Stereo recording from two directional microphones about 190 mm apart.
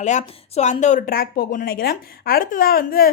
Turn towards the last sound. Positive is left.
turn(degrees=50)  # may be behind; listen again after turning